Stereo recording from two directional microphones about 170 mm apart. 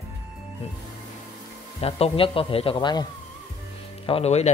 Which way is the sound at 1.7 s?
35° left (ahead or behind).